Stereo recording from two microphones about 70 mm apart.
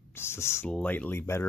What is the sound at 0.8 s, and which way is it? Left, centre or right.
Speech, left.